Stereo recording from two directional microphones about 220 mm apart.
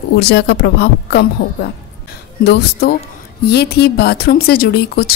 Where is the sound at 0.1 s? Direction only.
50° left (ahead or behind).